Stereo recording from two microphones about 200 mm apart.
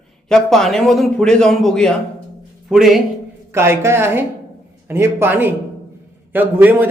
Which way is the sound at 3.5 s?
10° right (ahead or behind).